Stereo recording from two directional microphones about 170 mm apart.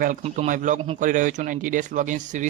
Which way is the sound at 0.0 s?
50° right (ahead or behind).